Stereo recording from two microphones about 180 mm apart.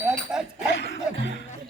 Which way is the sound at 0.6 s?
80° left.